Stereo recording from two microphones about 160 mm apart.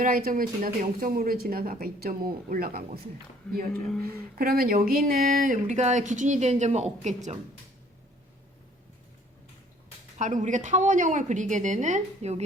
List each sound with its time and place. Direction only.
0.0 s speech: 60° right (ahead or behind)
10.2 s speech: 50° right (ahead or behind)